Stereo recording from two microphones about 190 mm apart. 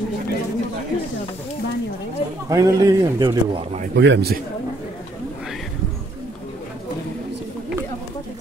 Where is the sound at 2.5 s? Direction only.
20° right (ahead or behind).